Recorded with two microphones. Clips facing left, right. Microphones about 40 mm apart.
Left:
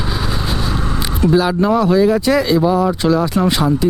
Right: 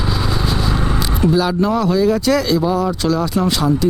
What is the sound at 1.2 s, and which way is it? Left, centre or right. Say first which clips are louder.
Speech: left 2 dB; centre.